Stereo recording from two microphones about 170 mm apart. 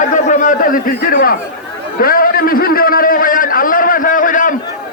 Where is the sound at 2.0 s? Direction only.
55° left (ahead or behind).